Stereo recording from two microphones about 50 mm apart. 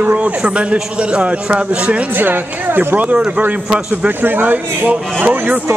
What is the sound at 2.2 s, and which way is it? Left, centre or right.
Speech, right.